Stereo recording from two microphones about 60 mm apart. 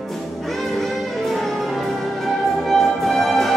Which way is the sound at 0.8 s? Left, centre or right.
Centre.